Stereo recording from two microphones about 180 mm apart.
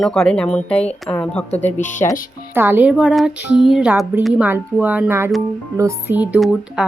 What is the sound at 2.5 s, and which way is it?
Speech, 10° right (ahead or behind).